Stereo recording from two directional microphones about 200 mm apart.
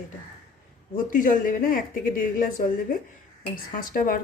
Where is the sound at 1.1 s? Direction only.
40° left (ahead or behind).